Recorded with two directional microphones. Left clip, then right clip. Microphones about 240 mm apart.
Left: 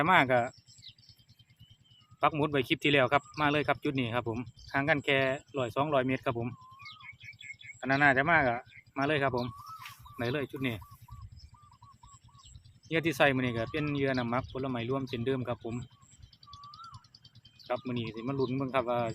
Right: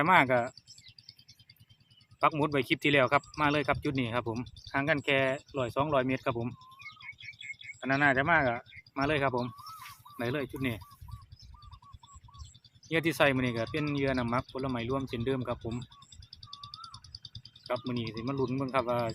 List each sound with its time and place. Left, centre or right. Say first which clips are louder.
0.0 s speech: right 1 dB; centre
2.2 s speech: right 1 dB; centre
7.0 s a sound: right 3 dB; right
7.8 s speech: left 1 dB; centre
9.7 s fowl: even; centre
12.9 s speech: even; centre
16.3 s a sound: right 4 dB; right
17.1 s bird: right 10 dB; right
17.8 s speech: right 1 dB; centre